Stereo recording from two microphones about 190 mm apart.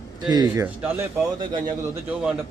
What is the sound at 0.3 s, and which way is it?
Speech, 20° right (ahead or behind).